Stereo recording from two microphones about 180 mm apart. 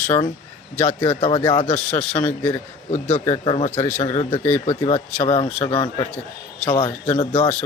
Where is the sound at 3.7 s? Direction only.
10° left (ahead or behind).